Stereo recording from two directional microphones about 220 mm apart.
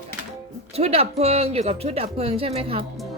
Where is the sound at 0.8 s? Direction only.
25° right (ahead or behind).